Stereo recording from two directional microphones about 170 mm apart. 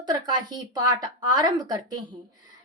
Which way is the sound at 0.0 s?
25° right (ahead or behind).